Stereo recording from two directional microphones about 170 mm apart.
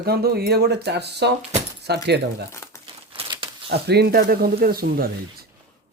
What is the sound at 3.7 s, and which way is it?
Speech, 70° right (ahead or behind).